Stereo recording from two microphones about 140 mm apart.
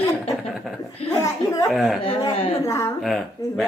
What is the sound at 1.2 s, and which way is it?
Speech, 25° left (ahead or behind).